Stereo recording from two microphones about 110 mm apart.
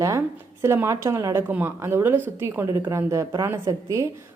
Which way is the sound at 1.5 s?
15° right (ahead or behind).